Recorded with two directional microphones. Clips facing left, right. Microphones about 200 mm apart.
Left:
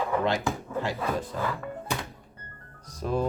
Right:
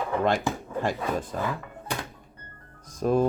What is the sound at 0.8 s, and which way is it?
Speech, 50° right (ahead or behind).